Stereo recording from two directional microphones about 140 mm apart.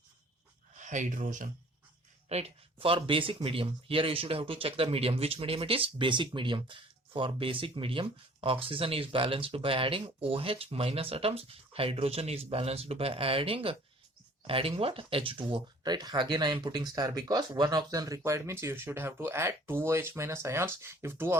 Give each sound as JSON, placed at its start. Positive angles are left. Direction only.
{"t": 0.8, "sound": "speech", "side_deg": -65}
{"t": 2.3, "sound": "speech", "side_deg": -50}
{"t": 2.8, "sound": "speech", "side_deg": -40}